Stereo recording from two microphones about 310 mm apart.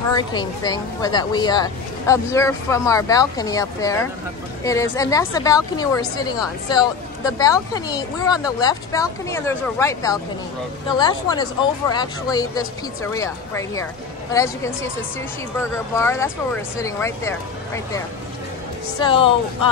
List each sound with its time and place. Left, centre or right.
0.1 s speech: centre
16.0 s speech: centre
18.9 s speech: centre